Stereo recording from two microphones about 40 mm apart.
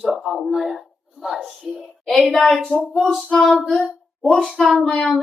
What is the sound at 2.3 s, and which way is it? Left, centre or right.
Speech, centre.